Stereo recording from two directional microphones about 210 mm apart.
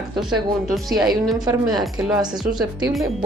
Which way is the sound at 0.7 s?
Centre (ahead or behind).